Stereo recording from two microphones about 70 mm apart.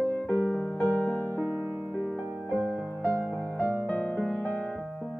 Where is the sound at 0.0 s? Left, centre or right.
Left.